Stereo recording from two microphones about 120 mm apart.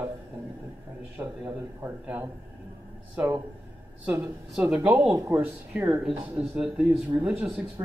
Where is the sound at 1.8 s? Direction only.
15° right (ahead or behind).